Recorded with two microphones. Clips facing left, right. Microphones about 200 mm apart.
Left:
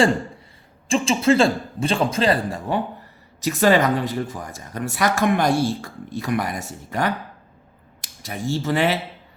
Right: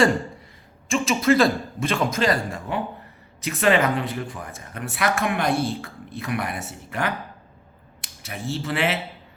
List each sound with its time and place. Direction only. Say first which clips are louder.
0.9 s speech: left 2 dB; 30° left (ahead or behind)
8.2 s speech: left 4 dB; 35° left (ahead or behind)